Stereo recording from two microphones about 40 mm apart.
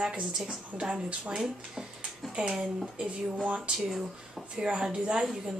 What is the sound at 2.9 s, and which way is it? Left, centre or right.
Speech, right.